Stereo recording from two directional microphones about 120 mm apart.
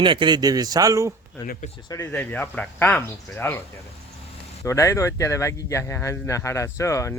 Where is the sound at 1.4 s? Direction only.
25° left (ahead or behind).